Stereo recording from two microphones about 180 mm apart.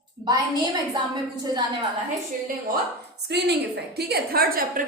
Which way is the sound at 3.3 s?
65° right (ahead or behind).